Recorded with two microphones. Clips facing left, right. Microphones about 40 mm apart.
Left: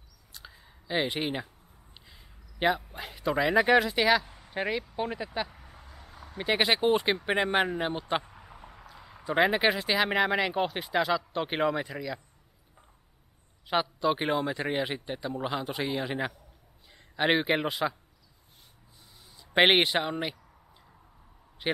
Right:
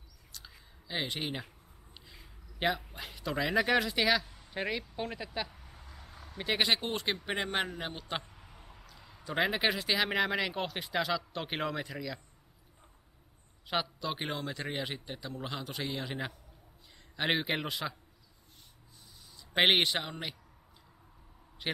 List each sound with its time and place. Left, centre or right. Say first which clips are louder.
0.3 s a sound: left 3 dB; centre
2.9 s speech: left 7 dB; centre
13.7 s speech: left 7 dB; centre
19.3 s speech: left 4 dB; centre